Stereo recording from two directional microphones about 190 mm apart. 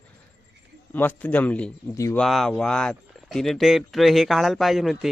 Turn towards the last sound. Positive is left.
turn(degrees=0)  # may be behind; listen again after turning